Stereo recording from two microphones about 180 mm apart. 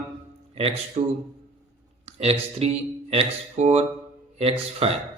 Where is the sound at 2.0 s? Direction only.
35° right (ahead or behind).